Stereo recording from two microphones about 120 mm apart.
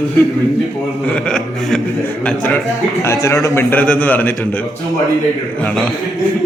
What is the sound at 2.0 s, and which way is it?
Speech, 15° left (ahead or behind).